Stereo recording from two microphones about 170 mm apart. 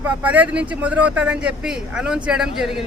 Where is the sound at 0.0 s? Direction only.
10° right (ahead or behind).